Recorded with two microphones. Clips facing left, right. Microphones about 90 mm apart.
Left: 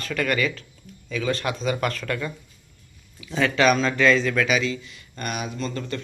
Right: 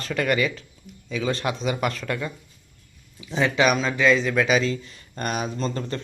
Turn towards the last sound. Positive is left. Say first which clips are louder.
# right 2 dB
turn(degrees=-30)  # may be behind; listen again after turning